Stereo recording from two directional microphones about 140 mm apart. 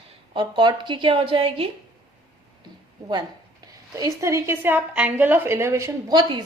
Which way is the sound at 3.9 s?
20° right (ahead or behind).